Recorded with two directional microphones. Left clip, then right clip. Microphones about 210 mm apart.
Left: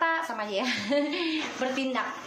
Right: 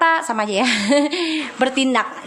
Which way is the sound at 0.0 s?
55° right (ahead or behind).